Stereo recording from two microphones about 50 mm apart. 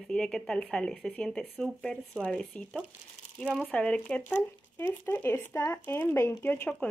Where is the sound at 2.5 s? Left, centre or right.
Left.